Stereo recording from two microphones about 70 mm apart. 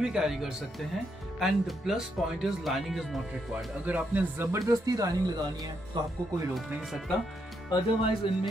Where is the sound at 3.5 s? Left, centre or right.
Right.